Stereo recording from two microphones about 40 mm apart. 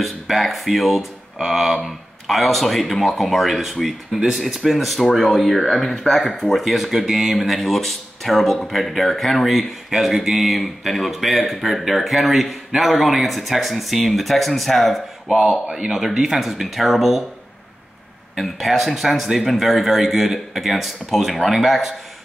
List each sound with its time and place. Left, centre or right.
0.0 s speech: centre
15.8 s speech: centre
18.4 s speech: centre